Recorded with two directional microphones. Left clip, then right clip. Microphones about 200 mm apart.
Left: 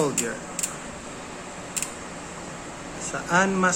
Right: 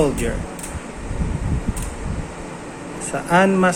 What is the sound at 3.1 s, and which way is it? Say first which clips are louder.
Speech: right 6 dB; 10° right (ahead or behind).